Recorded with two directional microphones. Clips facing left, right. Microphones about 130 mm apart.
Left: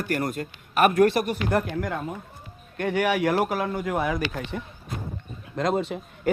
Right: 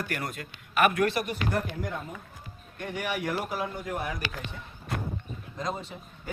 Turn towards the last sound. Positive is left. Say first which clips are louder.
# left 12 dB
turn(degrees=75)  # may be behind; listen again after turning